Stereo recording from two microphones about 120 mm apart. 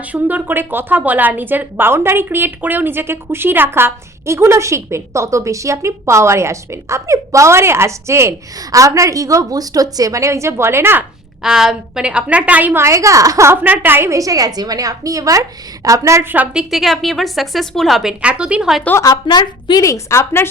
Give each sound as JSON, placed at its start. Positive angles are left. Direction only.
{"t": 0.1, "sound": "speech", "side_deg": -15}
{"t": 11.4, "sound": "speech", "side_deg": -5}
{"t": 16.3, "sound": "a woman's voice", "side_deg": -15}
{"t": 16.6, "sound": "a woman's voice", "side_deg": 0}
{"t": 18.9, "sound": "a woman's voice", "side_deg": 25}
{"t": 19.1, "sound": "a woman's voice", "side_deg": 35}